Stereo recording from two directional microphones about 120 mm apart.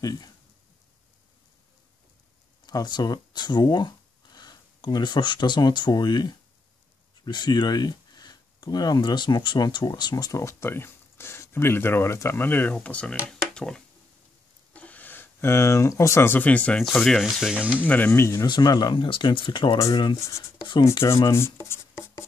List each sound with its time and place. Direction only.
0.0 s speech: 35° left (ahead or behind)
2.6 s speech: 35° left (ahead or behind); by 17.7 s 5° right (ahead or behind)
17.7 s speech: 15° left (ahead or behind)
18.5 s speech: 35° left (ahead or behind)
20.2 s speech: 25° left (ahead or behind)